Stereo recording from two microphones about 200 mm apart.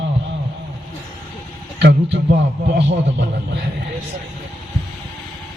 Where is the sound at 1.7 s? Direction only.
60° right (ahead or behind).